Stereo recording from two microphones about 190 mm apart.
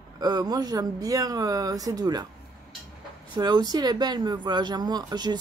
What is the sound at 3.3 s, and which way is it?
Speech, 20° right (ahead or behind).